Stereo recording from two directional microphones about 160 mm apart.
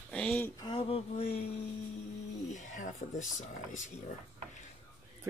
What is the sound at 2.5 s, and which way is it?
Speech, 50° left (ahead or behind).